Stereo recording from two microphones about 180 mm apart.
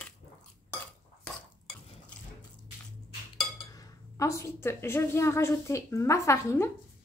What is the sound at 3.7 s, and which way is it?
A woman's voice, 20° left (ahead or behind).